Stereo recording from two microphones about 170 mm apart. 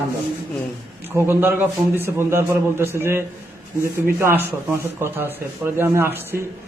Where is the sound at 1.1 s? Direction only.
15° right (ahead or behind).